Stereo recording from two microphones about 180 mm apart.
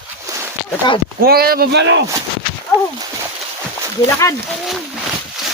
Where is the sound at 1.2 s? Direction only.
55° right (ahead or behind); by 2.0 s 80° right.